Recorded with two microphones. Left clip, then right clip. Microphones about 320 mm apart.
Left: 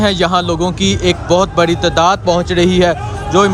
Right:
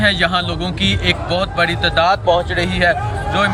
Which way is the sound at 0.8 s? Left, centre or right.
Left.